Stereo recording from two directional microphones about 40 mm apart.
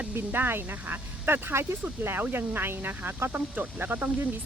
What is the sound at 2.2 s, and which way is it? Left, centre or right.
Speech, right.